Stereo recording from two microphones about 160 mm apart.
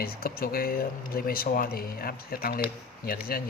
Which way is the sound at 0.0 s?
70° left (ahead or behind).